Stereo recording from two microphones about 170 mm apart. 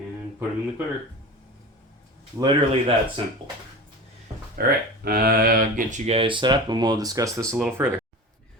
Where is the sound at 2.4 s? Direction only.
30° right (ahead or behind).